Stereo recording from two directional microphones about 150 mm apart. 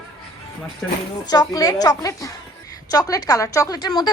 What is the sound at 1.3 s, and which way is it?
A woman's voice, 25° left (ahead or behind).